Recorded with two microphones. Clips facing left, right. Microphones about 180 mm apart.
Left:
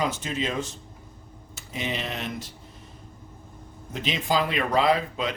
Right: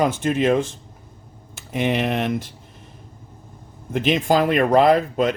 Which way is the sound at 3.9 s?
55° right (ahead or behind).